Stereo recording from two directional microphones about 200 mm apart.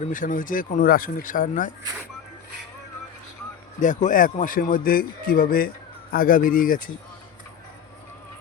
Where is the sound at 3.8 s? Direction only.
40° left (ahead or behind).